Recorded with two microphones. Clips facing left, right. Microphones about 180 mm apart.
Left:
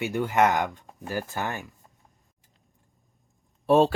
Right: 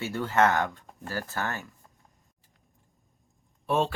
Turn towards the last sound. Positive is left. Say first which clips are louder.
# left 7 dB
turn(degrees=35)  # may be behind; listen again after turning